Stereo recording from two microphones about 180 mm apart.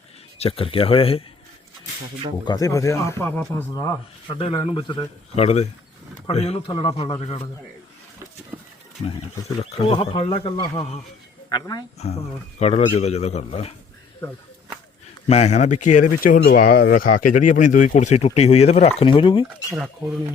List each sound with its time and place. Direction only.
0.3 s speech: 35° left (ahead or behind)
2.4 s speech: 20° left (ahead or behind)
4.3 s speech: 25° left (ahead or behind)
8.5 s a sound: 15° right (ahead or behind)
9.7 s speech: 30° left (ahead or behind)
11.9 s speech: 35° left (ahead or behind)
15.3 s speech: 40° left (ahead or behind)